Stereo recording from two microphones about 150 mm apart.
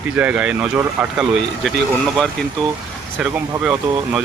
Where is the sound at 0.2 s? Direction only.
10° right (ahead or behind).